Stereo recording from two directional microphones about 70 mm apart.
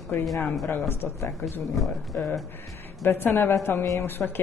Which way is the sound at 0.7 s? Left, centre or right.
Left.